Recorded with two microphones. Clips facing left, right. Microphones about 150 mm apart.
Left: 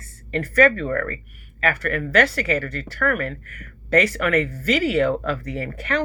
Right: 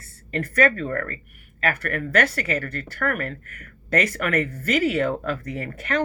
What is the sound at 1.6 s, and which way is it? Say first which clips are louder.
Speech: left 2 dB; 50° right (ahead or behind).